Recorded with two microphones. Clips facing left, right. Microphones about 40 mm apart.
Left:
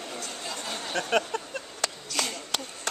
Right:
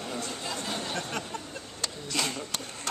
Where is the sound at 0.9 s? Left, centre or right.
Left.